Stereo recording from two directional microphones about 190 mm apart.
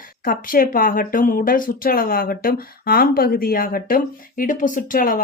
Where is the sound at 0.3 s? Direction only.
50° left (ahead or behind).